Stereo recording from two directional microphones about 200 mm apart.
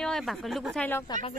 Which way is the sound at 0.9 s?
10° left (ahead or behind).